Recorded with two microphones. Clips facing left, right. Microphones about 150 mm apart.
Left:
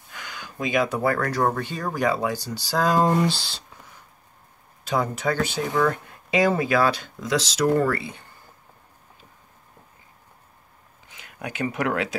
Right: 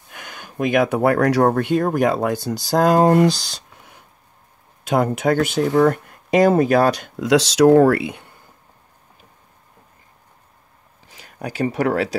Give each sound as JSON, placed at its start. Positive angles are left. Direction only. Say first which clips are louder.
{"t": 0.1, "sound": "speech", "louder": "right 1 dB", "side_deg": -55}
{"t": 4.8, "sound": "speech", "louder": "right 6 dB", "side_deg": -55}
{"t": 7.2, "sound": "speech", "louder": "right 9 dB", "side_deg": -70}
{"t": 11.1, "sound": "speech", "louder": "right 4 dB", "side_deg": -40}